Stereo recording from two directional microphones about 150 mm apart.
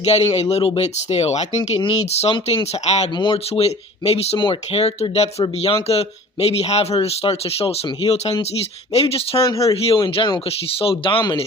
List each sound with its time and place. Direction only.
0.0 s speech: 45° left (ahead or behind)
3.2 s speech: 35° left (ahead or behind)
9.4 s speech: 20° left (ahead or behind)
9.8 s speech: 35° left (ahead or behind)